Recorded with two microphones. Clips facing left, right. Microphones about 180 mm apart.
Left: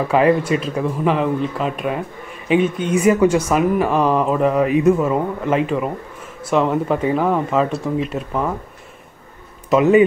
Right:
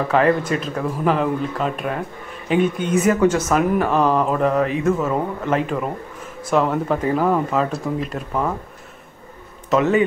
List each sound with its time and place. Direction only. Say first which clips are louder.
0.1 s speech: left 3 dB; 10° left (ahead or behind)
3.7 s speech: left 1 dB; centre (ahead or behind)
5.4 s speech: left 3 dB; centre (ahead or behind)
9.7 s a man's voice: left 4 dB; 15° left (ahead or behind)